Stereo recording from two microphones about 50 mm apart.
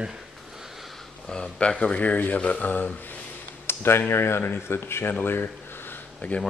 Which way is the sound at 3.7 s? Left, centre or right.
Left.